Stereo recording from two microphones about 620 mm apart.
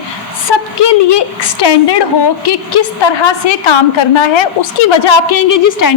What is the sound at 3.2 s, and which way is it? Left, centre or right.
A woman's voice, left.